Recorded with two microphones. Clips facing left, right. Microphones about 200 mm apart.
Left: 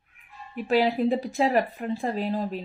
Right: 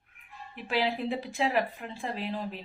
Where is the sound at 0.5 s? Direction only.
40° left (ahead or behind).